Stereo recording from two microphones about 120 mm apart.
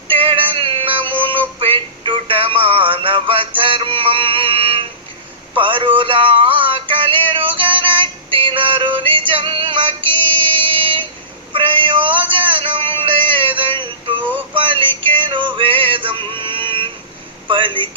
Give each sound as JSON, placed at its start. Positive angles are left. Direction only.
{"t": 0.1, "sound": "synthetic singing", "side_deg": -45}
{"t": 1.5, "sound": "music", "side_deg": -45}
{"t": 17.5, "sound": "a sound", "side_deg": -45}